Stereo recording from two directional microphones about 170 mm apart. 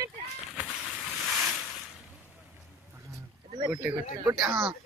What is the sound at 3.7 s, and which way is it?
Speech, 10° right (ahead or behind).